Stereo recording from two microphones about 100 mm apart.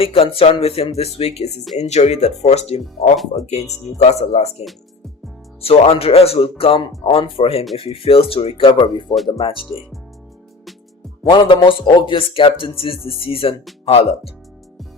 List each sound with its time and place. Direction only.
0.0 s speech: 70° left (ahead or behind); by 2.8 s 90° left
4.0 s speech: 90° left
5.6 s speech: 80° left; by 9.1 s 55° left (ahead or behind)
11.3 s speech: 55° left (ahead or behind)
13.8 s speech: 90° left